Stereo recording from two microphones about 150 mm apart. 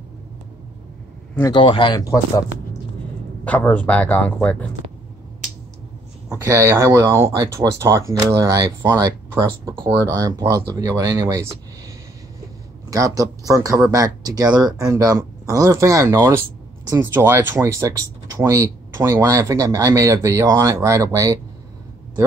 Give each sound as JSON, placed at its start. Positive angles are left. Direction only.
{"t": 1.5, "sound": "speech", "side_deg": 30}
{"t": 3.4, "sound": "speech", "side_deg": 10}
{"t": 6.3, "sound": "speech", "side_deg": -20}
{"t": 12.9, "sound": "speech", "side_deg": -25}